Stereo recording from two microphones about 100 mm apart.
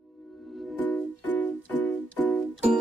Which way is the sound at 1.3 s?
15° left (ahead or behind).